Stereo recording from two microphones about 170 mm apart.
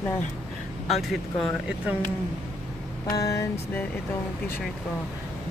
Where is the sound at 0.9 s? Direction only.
Centre (ahead or behind).